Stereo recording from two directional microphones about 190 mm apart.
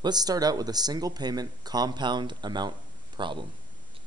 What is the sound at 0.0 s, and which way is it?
Speech, 20° right (ahead or behind).